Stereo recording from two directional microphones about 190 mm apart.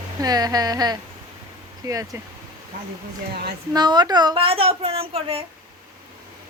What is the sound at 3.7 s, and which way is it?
A woman's voice, 20° right (ahead or behind).